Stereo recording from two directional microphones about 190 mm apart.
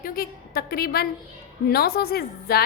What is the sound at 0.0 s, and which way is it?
A woman's voice, 50° left (ahead or behind).